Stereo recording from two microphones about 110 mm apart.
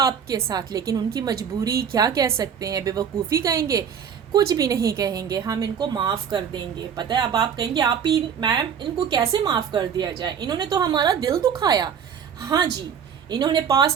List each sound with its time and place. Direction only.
0.0 s a woman's voice: 35° right (ahead or behind)